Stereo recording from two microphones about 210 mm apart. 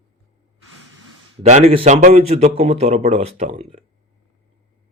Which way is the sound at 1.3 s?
30° right (ahead or behind).